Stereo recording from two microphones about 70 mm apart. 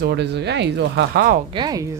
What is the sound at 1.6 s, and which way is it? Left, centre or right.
Speech, right.